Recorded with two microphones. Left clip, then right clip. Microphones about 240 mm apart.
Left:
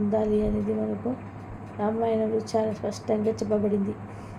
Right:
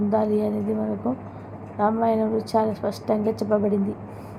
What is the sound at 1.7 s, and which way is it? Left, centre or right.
A woman's voice, centre.